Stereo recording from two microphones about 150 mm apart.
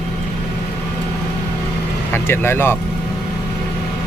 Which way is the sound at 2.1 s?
15° left (ahead or behind).